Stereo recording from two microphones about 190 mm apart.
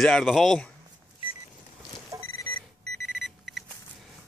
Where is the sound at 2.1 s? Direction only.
20° right (ahead or behind).